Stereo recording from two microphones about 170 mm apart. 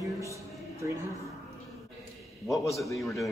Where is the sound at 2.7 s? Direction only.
20° left (ahead or behind).